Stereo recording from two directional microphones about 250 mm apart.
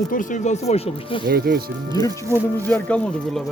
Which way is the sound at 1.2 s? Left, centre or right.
Right.